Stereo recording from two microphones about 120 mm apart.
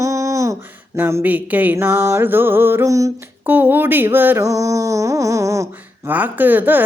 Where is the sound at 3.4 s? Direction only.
15° right (ahead or behind).